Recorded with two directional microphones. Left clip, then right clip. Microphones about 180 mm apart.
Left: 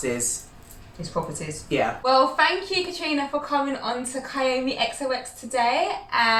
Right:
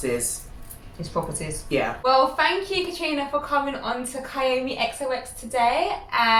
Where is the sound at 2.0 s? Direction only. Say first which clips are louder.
Even; 15° right (ahead or behind).